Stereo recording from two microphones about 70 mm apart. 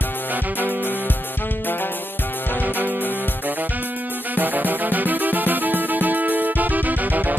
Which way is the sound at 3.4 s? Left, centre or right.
Right.